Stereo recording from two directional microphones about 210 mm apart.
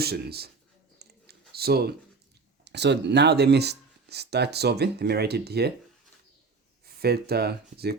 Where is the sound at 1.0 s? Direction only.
50° right (ahead or behind).